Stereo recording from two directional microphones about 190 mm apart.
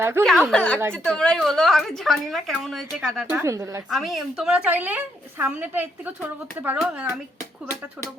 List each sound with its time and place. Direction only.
0.0 s a woman's voice: 10° right (ahead or behind)
0.5 s a woman's voice: 5° left (ahead or behind)
3.2 s a woman's voice: 15° right (ahead or behind)
3.8 s a woman's voice: centre (ahead or behind)